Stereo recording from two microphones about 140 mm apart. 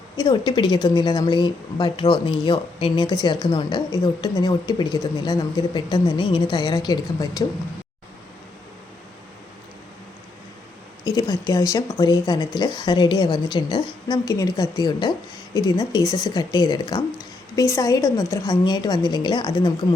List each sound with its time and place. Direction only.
0.2 s speech: 30° left (ahead or behind)
11.0 s speech: 25° left (ahead or behind)